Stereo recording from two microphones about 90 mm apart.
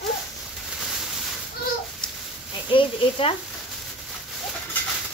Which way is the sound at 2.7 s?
80° left.